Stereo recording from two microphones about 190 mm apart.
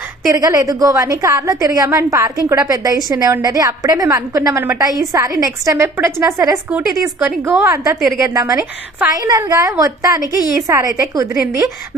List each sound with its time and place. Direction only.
0.3 s a woman's voice: 15° right (ahead or behind)